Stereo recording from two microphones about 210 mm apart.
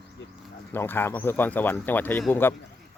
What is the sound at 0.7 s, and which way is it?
Speech, 10° left (ahead or behind).